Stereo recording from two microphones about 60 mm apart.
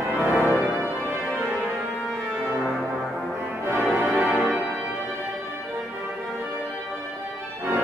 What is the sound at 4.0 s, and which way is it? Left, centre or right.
Music, centre.